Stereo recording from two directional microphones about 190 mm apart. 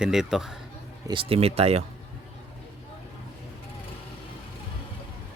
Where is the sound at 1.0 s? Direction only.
25° right (ahead or behind).